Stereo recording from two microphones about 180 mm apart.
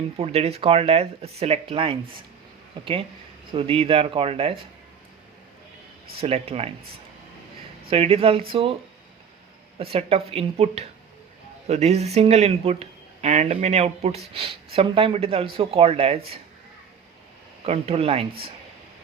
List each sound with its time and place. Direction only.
0.2 s speech: 35° right (ahead or behind)
6.1 s speech: 35° right (ahead or behind)
7.9 s speech: 35° right (ahead or behind)
9.7 s speech: 35° right (ahead or behind)
17.6 s speech: 35° right (ahead or behind)